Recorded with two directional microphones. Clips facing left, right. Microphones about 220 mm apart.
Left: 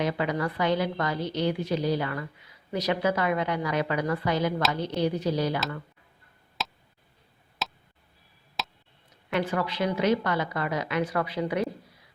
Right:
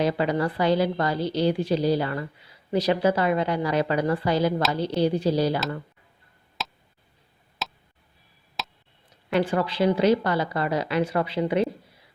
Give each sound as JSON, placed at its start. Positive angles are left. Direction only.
{"t": 0.0, "sound": "a woman's voice", "side_deg": -30}
{"t": 6.6, "sound": "tick", "side_deg": 0}
{"t": 7.6, "sound": "a sound", "side_deg": 0}
{"t": 8.6, "sound": "tick", "side_deg": 0}
{"t": 9.3, "sound": "a woman's voice", "side_deg": -30}